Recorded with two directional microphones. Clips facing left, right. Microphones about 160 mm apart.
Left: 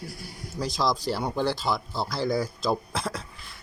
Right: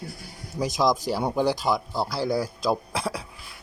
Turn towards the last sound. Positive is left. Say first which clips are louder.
# right 2 dB
turn(degrees=-10)  # may be behind; listen again after turning